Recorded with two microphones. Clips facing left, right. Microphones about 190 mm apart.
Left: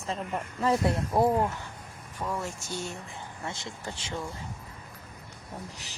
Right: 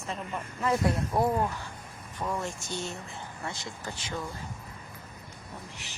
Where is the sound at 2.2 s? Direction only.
5° left (ahead or behind).